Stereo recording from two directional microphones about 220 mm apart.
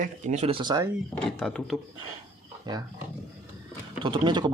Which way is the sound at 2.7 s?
20° right (ahead or behind).